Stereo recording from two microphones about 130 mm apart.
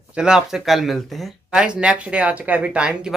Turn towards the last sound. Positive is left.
turn(degrees=-10)  # may be behind; listen again after turning